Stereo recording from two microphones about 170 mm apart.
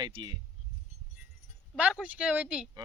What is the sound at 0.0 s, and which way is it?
Speech, 25° right (ahead or behind).